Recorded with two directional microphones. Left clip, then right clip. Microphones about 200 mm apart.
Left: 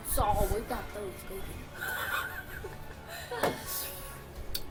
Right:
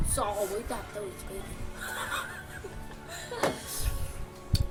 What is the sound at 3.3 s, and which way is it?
Music, 10° left (ahead or behind).